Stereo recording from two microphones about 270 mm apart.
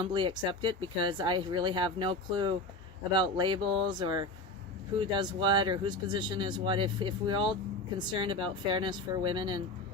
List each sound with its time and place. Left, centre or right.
0.0 s speech: centre